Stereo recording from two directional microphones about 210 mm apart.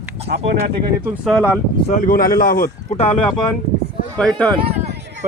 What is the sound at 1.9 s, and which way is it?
Speech, 40° left (ahead or behind).